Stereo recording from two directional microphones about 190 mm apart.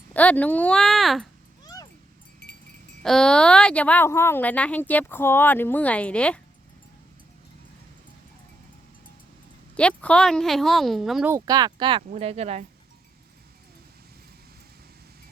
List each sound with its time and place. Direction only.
0.1 s speech: 10° left (ahead or behind)
1.6 s a sound: 20° left (ahead or behind)
3.0 s a woman's voice: 5° left (ahead or behind)
9.7 s speech: 5° left (ahead or behind)
11.3 s speech: 20° right (ahead or behind); by 12.6 s 35° right (ahead or behind)